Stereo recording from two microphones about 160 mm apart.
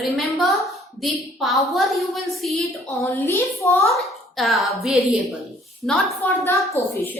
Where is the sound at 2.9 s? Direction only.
15° left (ahead or behind).